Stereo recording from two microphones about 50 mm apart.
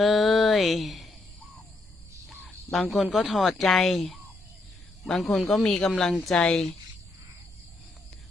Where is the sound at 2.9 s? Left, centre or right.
Centre.